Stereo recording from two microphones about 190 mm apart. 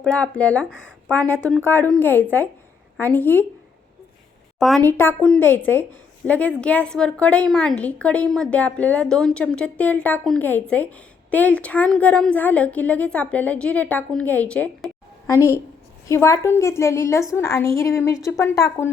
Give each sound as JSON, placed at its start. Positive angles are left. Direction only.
{"t": 0.0, "sound": "a woman's voice", "side_deg": 5}
{"t": 4.8, "sound": "a woman's voice", "side_deg": 10}